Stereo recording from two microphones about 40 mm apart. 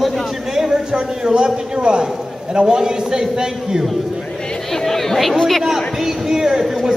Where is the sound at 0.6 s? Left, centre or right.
Centre.